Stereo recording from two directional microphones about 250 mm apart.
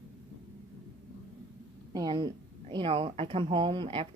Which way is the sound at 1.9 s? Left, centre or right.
Centre.